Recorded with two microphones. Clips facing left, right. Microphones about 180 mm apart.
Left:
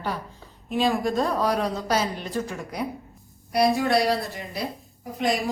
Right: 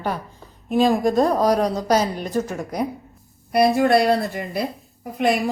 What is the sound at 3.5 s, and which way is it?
A woman's voice, 55° right (ahead or behind).